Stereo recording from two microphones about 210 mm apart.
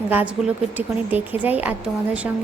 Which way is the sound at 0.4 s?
Centre (ahead or behind).